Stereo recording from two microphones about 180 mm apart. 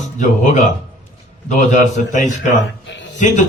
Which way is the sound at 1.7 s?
45° left (ahead or behind).